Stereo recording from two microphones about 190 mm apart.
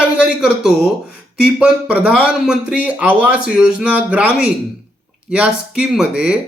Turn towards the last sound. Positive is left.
turn(degrees=-5)  # may be behind; listen again after turning